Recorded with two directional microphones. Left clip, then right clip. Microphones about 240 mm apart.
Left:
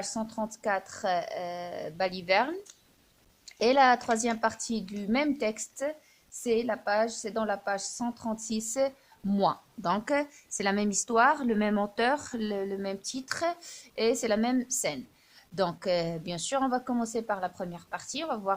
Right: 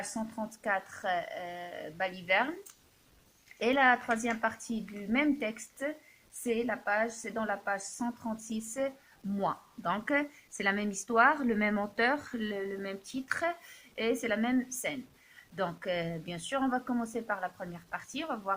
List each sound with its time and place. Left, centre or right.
0.0 s speech: left
3.6 s speech: left